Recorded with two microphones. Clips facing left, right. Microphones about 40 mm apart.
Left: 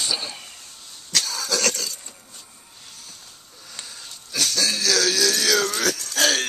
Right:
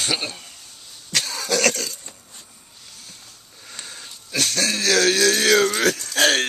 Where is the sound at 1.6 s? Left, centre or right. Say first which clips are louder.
Right 6 dB; right.